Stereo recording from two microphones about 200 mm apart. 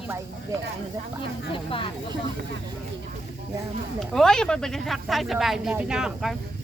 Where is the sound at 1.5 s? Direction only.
25° left (ahead or behind).